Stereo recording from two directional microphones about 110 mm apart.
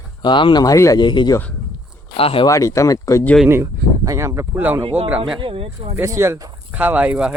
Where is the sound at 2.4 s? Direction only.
30° left (ahead or behind).